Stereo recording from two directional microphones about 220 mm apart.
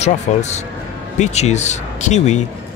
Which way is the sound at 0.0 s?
30° left (ahead or behind).